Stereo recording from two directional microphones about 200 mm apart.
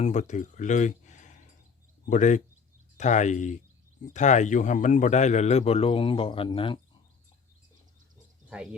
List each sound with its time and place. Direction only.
0.0 s a man's voice: 35° left (ahead or behind)